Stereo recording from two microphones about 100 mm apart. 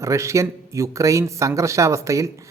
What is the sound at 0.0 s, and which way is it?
Speech, 30° right (ahead or behind).